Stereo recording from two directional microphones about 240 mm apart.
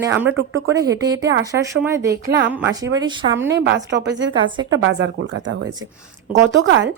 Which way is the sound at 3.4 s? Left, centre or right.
Right.